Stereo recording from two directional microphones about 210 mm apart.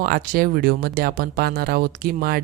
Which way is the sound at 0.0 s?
45° right (ahead or behind).